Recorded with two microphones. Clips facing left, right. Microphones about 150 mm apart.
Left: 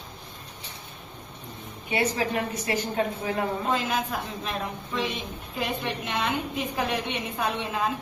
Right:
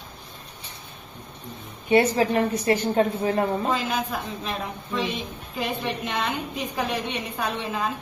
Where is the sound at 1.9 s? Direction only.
35° right (ahead or behind).